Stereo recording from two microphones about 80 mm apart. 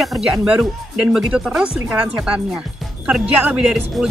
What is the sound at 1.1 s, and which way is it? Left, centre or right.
A woman's voice, centre.